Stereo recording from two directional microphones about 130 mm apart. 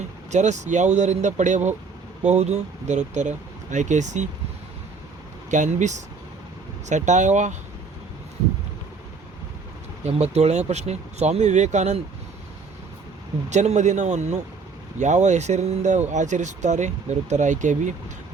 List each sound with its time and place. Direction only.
0.3 s speech: 65° right (ahead or behind)
5.5 s speech: 70° right (ahead or behind)
10.0 s speech: 55° right (ahead or behind)
13.5 s speech: 65° right (ahead or behind)